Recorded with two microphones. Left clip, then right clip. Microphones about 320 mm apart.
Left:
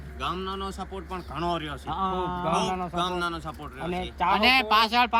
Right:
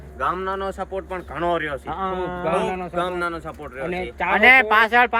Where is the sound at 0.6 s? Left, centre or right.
Centre.